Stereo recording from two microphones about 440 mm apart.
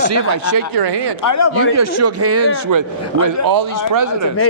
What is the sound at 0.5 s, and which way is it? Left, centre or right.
Speech, right.